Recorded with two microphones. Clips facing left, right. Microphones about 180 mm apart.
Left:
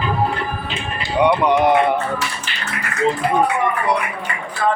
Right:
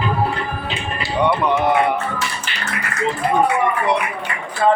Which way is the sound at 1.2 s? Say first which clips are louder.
Left 3 dB; 15° left (ahead or behind).